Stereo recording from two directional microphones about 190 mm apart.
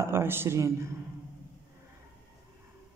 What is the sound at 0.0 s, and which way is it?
Speech, 10° right (ahead or behind).